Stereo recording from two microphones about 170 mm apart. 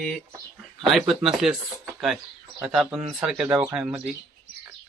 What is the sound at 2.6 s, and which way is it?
Speech, 5° right (ahead or behind).